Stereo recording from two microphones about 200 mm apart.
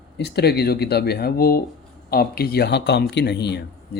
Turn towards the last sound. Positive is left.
turn(degrees=55)  # may be behind; listen again after turning